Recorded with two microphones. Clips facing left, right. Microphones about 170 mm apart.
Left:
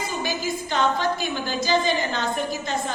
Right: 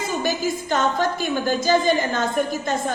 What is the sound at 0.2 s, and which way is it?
A woman's voice, 45° right (ahead or behind).